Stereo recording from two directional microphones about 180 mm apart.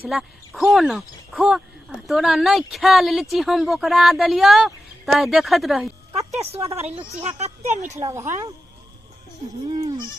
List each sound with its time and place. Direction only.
0.1 s speech: centre (ahead or behind)
6.3 s speech: 35° right (ahead or behind)
9.6 s speech: 35° right (ahead or behind)